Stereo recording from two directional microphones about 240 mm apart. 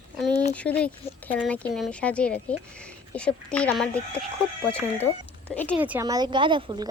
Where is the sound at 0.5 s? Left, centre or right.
Centre.